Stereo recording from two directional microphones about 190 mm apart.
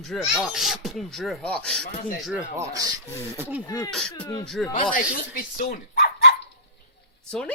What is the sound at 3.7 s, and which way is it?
Speech, 15° left (ahead or behind).